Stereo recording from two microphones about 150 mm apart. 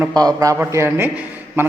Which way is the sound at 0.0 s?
25° right (ahead or behind).